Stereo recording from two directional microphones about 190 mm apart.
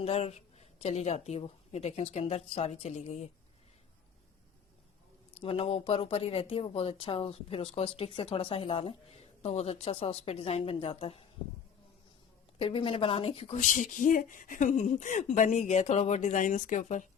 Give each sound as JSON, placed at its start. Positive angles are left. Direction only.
{"t": 0.0, "sound": "a woman's voice", "side_deg": 35}
{"t": 5.4, "sound": "a woman's voice", "side_deg": 30}
{"t": 12.5, "sound": "a woman's voice", "side_deg": 30}